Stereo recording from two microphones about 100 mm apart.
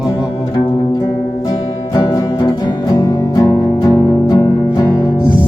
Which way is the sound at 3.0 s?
35° left (ahead or behind).